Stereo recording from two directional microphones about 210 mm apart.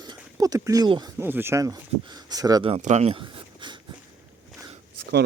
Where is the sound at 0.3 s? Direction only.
15° right (ahead or behind).